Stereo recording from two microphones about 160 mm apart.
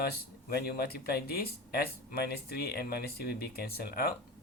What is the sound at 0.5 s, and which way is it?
Speech, 70° left (ahead or behind).